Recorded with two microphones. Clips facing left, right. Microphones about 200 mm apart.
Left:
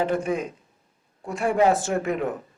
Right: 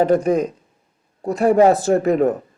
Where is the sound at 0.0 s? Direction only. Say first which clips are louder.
Right 8 dB; 40° right (ahead or behind).